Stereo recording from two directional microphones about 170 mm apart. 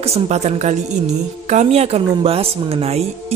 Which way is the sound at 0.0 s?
40° right (ahead or behind).